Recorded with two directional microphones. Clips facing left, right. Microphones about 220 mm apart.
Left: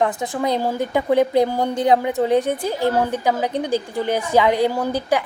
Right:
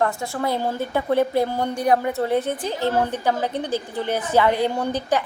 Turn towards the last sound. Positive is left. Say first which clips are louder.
# left 2 dB
turn(degrees=10)  # may be behind; listen again after turning